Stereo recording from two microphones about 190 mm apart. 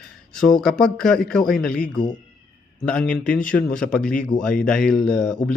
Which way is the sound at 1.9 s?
25° left (ahead or behind).